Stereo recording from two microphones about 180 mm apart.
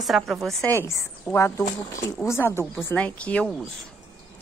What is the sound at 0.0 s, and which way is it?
Speech, centre (ahead or behind).